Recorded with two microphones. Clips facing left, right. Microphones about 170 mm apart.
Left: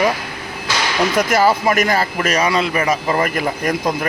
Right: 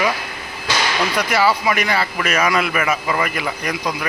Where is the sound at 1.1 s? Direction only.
45° left (ahead or behind).